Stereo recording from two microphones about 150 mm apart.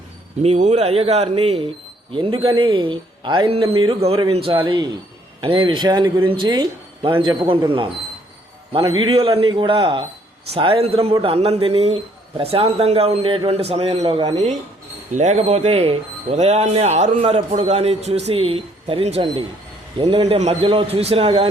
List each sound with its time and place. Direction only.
0.4 s a man's voice: 45° right (ahead or behind)
15.1 s a man's voice: 50° right (ahead or behind)